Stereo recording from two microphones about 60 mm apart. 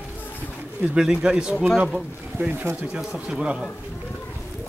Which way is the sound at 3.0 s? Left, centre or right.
Centre.